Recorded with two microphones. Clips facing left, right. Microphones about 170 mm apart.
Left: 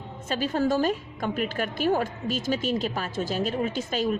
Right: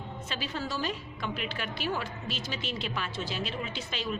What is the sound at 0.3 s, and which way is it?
Speech, 45° left (ahead or behind).